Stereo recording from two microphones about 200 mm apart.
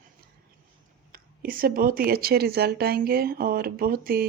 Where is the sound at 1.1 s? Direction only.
45° right (ahead or behind).